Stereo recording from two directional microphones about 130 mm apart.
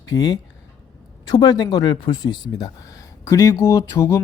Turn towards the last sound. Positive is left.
turn(degrees=20)  # may be behind; listen again after turning